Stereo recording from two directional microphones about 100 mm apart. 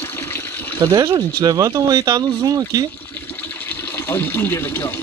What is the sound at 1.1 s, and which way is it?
Speech, 40° right (ahead or behind).